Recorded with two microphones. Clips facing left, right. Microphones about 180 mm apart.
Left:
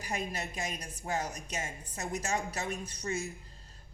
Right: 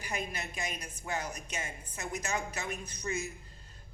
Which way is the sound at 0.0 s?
40° left (ahead or behind).